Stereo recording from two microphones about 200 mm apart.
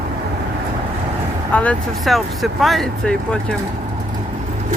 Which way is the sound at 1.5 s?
5° left (ahead or behind).